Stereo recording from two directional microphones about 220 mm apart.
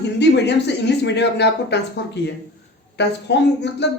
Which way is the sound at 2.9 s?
50° left (ahead or behind).